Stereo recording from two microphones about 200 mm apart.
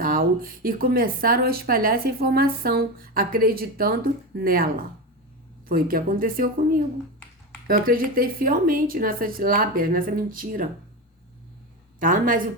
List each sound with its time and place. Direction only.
0.0 s speech: 45° right (ahead or behind)
7.7 s speech: 45° right (ahead or behind)
11.9 s speech: 45° right (ahead or behind)